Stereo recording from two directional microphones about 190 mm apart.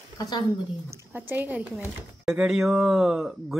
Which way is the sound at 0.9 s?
15° right (ahead or behind).